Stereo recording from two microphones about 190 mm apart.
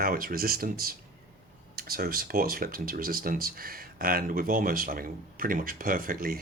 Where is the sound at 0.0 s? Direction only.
50° right (ahead or behind).